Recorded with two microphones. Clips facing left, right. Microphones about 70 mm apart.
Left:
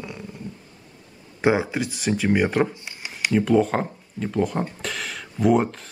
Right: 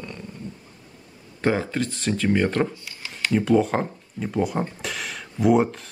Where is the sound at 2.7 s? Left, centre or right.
Left.